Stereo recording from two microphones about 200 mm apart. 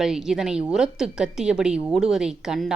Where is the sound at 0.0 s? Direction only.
5° right (ahead or behind).